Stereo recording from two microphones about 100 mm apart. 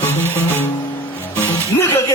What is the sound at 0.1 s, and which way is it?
Music, 25° left (ahead or behind).